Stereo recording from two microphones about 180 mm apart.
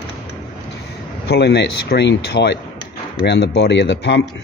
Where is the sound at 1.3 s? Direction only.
70° left (ahead or behind).